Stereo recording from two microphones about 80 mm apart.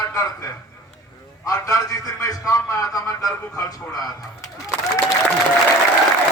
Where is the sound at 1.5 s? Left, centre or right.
Left.